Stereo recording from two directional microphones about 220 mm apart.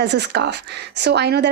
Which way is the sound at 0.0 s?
50° right (ahead or behind).